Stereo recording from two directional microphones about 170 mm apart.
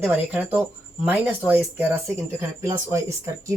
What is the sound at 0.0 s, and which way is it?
Speech, 10° right (ahead or behind).